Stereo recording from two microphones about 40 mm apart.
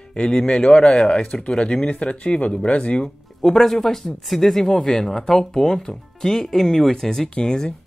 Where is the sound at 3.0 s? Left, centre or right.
Centre.